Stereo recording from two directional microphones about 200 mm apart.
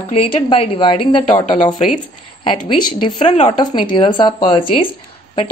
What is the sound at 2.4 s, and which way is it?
A woman's voice, 25° left (ahead or behind).